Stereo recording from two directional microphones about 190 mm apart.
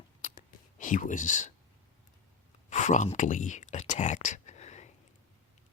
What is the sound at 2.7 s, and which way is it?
Speech, 40° left (ahead or behind).